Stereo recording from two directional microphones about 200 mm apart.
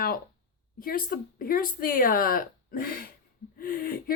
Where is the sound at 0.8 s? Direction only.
45° left (ahead or behind).